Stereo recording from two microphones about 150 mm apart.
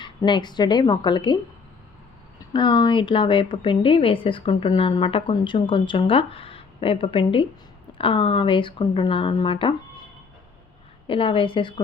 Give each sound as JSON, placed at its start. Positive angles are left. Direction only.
{"t": 0.0, "sound": "a woman's voice", "side_deg": 30}
{"t": 2.5, "sound": "speech", "side_deg": 30}
{"t": 11.0, "sound": "speech", "side_deg": 35}